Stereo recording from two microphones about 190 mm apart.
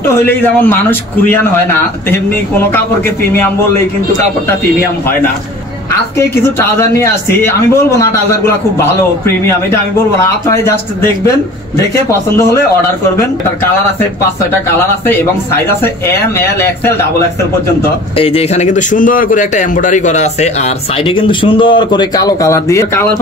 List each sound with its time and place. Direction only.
0.3 s a man's voice: 10° left (ahead or behind)
6.1 s a man's voice: 15° left (ahead or behind)
16.3 s a man's voice: 10° left (ahead or behind)
18.1 s a man's voice: 30° left (ahead or behind)